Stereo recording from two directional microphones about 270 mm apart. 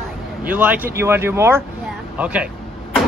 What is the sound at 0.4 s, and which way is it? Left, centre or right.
A man's voice, centre.